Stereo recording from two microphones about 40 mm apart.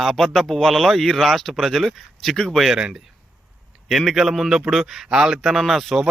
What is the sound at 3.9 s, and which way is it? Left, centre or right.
A man's voice, centre.